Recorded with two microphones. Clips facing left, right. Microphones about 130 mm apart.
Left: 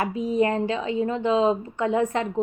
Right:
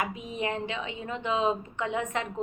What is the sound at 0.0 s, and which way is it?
A woman's voice, 35° left (ahead or behind).